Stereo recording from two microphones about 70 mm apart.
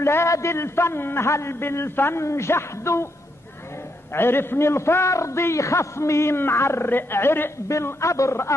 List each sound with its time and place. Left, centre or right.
0.0 s a man's voice: left
4.1 s a man's voice: left
7.6 s a man's voice: left